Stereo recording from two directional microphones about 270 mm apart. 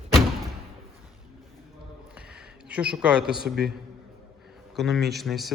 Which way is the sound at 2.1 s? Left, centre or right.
Centre.